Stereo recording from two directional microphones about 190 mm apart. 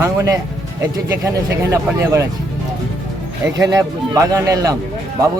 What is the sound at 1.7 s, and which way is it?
Speech, 15° right (ahead or behind).